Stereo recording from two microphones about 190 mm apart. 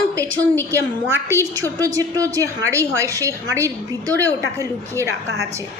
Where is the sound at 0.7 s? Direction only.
15° right (ahead or behind).